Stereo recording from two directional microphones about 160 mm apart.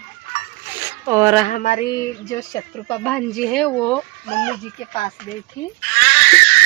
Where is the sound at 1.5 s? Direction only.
50° left (ahead or behind).